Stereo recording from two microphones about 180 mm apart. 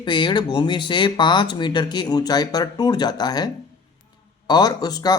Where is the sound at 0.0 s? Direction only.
25° left (ahead or behind).